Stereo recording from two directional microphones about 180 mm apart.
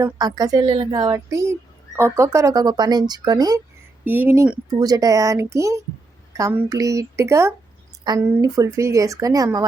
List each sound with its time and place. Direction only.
0.0 s a woman's voice: 20° right (ahead or behind)
4.0 s a woman's voice: 10° right (ahead or behind)
4.7 s a woman's voice: 20° right (ahead or behind)